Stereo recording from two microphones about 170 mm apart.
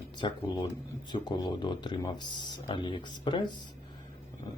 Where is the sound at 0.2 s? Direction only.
25° left (ahead or behind).